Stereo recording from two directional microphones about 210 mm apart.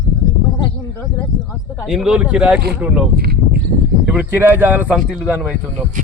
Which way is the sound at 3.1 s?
50° right (ahead or behind).